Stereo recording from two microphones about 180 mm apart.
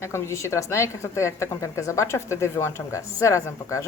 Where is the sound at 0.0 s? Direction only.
15° left (ahead or behind).